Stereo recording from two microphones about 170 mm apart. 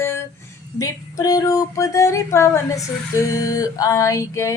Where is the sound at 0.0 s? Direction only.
15° left (ahead or behind).